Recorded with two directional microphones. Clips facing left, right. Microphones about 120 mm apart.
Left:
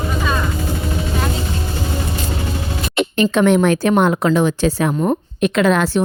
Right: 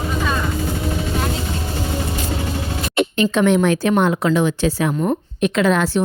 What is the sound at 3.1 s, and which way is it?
Speech, 50° left (ahead or behind).